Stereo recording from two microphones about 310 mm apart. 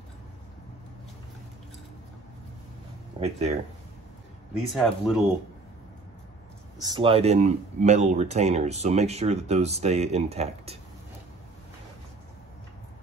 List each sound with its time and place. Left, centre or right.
3.2 s speech: right
4.7 s speech: centre
6.8 s speech: centre